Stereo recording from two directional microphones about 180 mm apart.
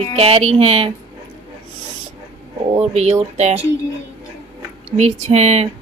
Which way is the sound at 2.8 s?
35° right (ahead or behind).